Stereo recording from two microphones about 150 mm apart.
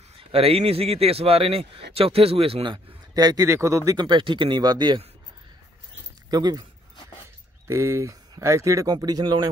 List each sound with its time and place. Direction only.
0.2 s a man's voice: 40° right (ahead or behind)
6.3 s speech: 25° right (ahead or behind)
7.6 s speech: 20° right (ahead or behind)